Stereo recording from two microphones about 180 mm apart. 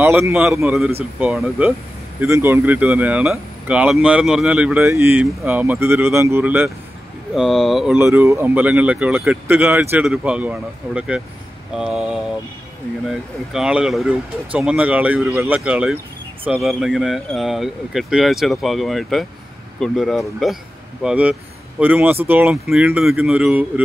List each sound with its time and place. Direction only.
0.0 s speech: 10° right (ahead or behind)
7.3 s speech: centre (ahead or behind)
11.7 s a sound: centre (ahead or behind)
13.1 s speech: 5° right (ahead or behind)